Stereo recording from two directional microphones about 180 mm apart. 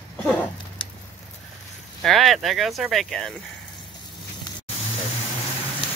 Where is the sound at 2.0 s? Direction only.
Centre (ahead or behind).